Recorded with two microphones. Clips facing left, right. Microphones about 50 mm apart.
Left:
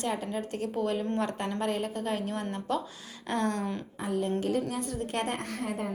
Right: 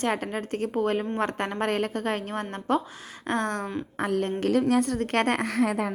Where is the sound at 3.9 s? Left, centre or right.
Right.